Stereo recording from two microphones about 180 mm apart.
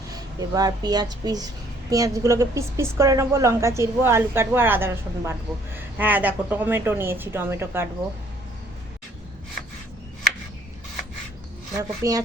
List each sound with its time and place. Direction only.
0.1 s a woman's voice: 20° right (ahead or behind)
11.8 s speech: 20° right (ahead or behind)